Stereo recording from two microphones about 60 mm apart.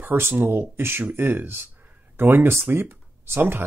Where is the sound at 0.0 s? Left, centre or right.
Right.